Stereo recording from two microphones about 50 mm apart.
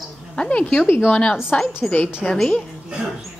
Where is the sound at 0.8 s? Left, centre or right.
Left.